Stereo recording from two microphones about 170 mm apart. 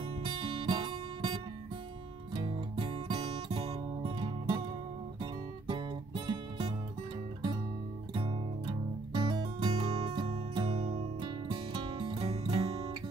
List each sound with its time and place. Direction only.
0.0 s music: 30° right (ahead or behind)
8.1 s music: 30° right (ahead or behind)